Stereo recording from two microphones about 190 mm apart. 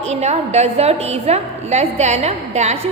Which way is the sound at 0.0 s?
35° right (ahead or behind).